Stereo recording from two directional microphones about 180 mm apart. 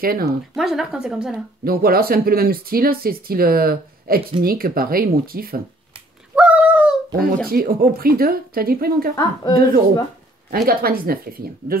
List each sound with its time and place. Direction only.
0.0 s speech: 55° right (ahead or behind)
0.6 s a woman's voice: centre (ahead or behind)
1.6 s speech: 55° right (ahead or behind)
6.3 s a sound: 5° right (ahead or behind)
7.4 s speech: 55° right (ahead or behind)
9.1 s a woman's voice: 20° left (ahead or behind)
10.5 s speech: 55° right (ahead or behind)